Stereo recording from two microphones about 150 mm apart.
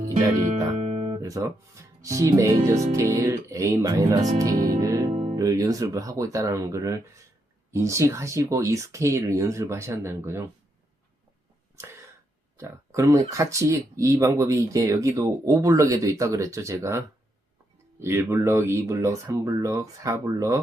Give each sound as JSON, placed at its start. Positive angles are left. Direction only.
{"t": 0.4, "sound": "music", "side_deg": -50}
{"t": 1.2, "sound": "speech", "side_deg": -20}
{"t": 5.1, "sound": "music", "side_deg": -40}
{"t": 5.4, "sound": "speech", "side_deg": -25}
{"t": 12.5, "sound": "speech", "side_deg": -20}
{"t": 18.0, "sound": "speech", "side_deg": -15}